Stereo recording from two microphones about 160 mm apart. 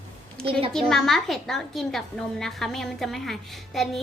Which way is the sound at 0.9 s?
Centre (ahead or behind).